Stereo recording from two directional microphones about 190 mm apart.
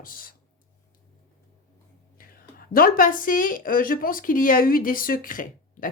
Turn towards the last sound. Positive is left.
turn(degrees=45)  # may be behind; listen again after turning